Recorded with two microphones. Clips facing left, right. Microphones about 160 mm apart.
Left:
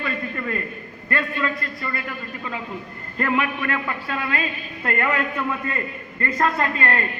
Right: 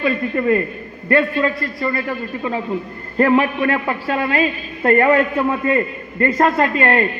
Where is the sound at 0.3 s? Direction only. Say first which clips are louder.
Right 11 dB; 30° right (ahead or behind).